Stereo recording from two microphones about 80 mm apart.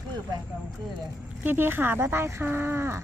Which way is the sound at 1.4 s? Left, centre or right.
Right.